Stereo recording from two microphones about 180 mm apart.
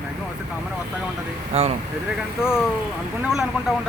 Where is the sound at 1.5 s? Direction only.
35° right (ahead or behind).